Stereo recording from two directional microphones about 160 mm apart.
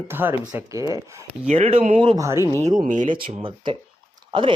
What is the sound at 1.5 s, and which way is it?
Speech, 40° right (ahead or behind).